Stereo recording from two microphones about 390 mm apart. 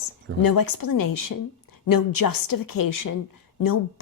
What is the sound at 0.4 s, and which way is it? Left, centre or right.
Speech, left.